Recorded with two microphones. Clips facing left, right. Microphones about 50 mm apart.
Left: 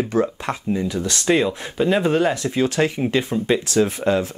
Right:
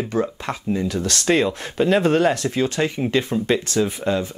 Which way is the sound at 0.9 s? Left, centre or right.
Centre.